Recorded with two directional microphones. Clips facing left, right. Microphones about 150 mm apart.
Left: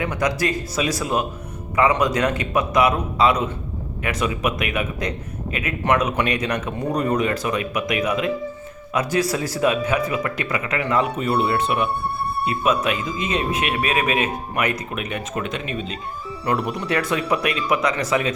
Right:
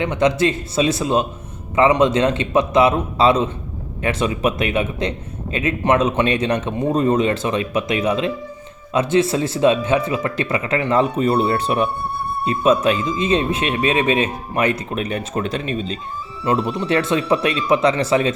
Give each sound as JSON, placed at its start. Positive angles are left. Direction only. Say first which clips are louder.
{"t": 0.0, "sound": "speech", "louder": "right 5 dB", "side_deg": -25}